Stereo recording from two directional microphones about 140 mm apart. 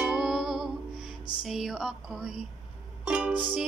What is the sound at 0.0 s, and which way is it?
Music, 5° right (ahead or behind).